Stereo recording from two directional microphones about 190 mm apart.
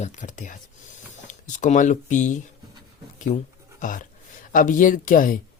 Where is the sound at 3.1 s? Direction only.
40° left (ahead or behind).